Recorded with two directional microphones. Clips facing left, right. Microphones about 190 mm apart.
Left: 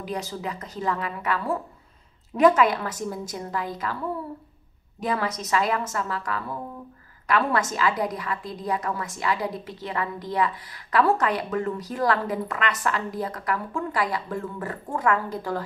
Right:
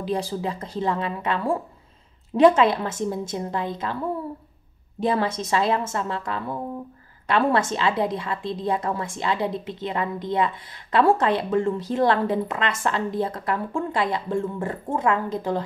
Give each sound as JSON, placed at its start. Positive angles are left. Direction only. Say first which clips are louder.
{"t": 0.0, "sound": "a woman's voice", "louder": "right 5 dB", "side_deg": -30}
{"t": 5.0, "sound": "a woman's voice", "louder": "right 4 dB", "side_deg": -30}